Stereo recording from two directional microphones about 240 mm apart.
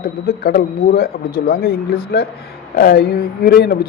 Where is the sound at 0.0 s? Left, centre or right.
Left.